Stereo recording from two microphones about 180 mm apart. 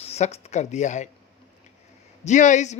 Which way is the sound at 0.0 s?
35° left (ahead or behind).